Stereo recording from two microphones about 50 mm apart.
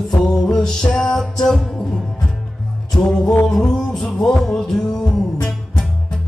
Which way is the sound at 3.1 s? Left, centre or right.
Left.